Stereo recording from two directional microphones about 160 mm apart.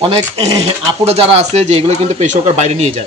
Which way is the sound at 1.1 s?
40° right (ahead or behind).